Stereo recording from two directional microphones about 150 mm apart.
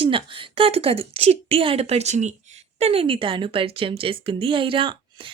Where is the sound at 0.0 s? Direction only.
35° right (ahead or behind).